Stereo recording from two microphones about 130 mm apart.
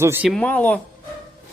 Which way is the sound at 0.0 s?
15° right (ahead or behind).